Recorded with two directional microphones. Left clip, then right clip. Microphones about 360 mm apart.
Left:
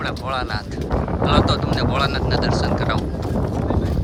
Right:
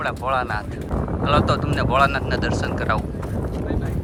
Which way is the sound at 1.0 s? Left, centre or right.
Left.